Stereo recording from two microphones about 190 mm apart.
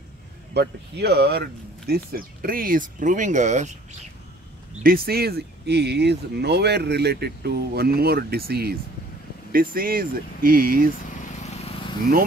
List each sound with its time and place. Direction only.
0.6 s speech: 60° right (ahead or behind); by 3.7 s 40° right (ahead or behind)
4.8 s speech: 50° right (ahead or behind)
11.4 s vehicle: 35° left (ahead or behind)